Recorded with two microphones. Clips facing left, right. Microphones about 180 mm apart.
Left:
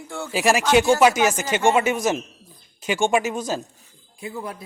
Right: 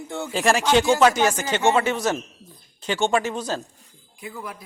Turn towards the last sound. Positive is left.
turn(degrees=25)  # may be behind; listen again after turning